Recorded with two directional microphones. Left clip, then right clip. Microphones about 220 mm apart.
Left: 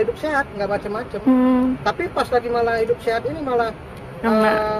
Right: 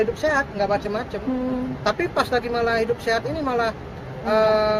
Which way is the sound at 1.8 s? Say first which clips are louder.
Left 1 dB; 15° right (ahead or behind).